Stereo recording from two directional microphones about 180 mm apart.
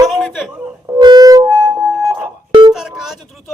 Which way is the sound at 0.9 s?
20° right (ahead or behind).